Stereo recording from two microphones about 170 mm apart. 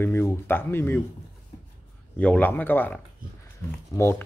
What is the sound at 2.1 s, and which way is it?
Speech, 10° left (ahead or behind).